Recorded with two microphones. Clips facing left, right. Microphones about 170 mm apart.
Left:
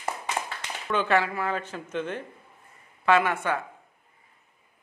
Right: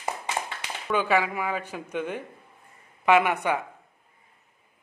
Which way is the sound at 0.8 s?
5° right (ahead or behind).